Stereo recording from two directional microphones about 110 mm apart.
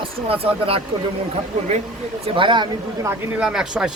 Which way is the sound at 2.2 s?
50° right (ahead or behind).